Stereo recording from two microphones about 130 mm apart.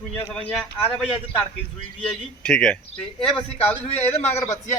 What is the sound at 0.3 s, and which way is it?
Speech, 10° left (ahead or behind).